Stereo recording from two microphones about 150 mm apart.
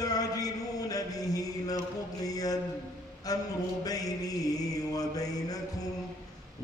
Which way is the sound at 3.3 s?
25° left (ahead or behind).